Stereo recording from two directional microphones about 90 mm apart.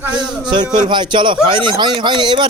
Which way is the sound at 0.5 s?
55° right (ahead or behind).